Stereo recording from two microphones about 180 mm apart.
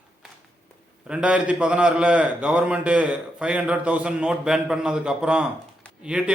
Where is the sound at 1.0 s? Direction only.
5° right (ahead or behind).